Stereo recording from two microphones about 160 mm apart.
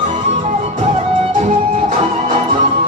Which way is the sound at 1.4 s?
50° right (ahead or behind).